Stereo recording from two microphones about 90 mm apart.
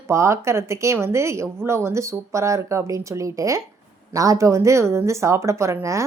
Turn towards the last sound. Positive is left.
turn(degrees=-35)  # may be behind; listen again after turning